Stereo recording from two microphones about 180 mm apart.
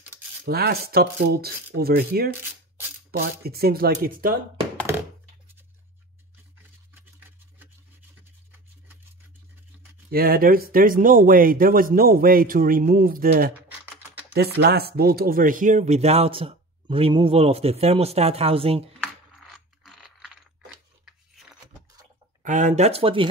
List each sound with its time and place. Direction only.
0.5 s speech: 60° right (ahead or behind)
6.9 s a sound: 10° right (ahead or behind)
10.1 s speech: 55° right (ahead or behind)
14.3 s speech: 65° right (ahead or behind); by 18.9 s 30° right (ahead or behind)
19.5 s mechanisms: centre (ahead or behind)
21.0 s a sound: centre (ahead or behind)
22.4 s speech: 45° right (ahead or behind)